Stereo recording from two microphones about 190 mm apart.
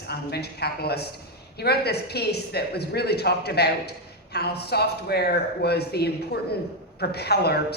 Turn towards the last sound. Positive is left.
turn(degrees=60)  # may be behind; listen again after turning